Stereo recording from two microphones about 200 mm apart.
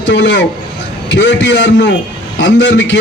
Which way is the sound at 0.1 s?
65° left (ahead or behind).